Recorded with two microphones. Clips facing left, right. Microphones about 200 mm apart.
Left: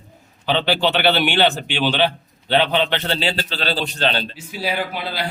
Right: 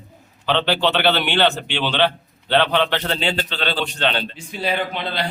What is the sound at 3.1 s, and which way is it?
A man's voice, 35° left (ahead or behind).